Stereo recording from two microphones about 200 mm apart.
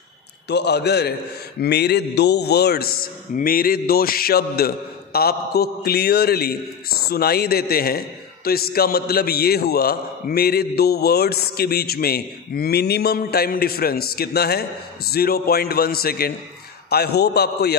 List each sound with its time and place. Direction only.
0.5 s a man's voice: 55° left (ahead or behind)